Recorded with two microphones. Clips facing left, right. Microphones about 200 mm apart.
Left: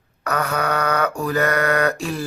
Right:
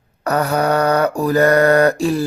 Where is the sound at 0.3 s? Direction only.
35° right (ahead or behind).